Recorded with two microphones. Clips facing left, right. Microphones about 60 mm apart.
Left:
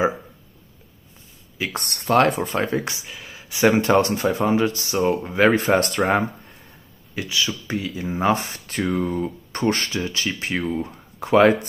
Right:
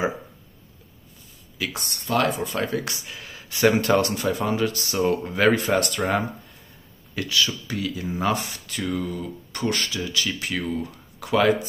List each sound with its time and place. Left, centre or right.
1.7 s speech: left
3.1 s speech: centre; by 4.9 s left
4.9 s speech: centre
5.6 s speech: left
7.2 s speech: centre